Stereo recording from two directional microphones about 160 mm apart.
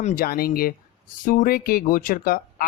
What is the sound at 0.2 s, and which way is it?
Speech, 70° left (ahead or behind).